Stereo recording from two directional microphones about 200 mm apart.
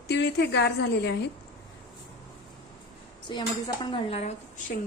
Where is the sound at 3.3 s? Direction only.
20° left (ahead or behind).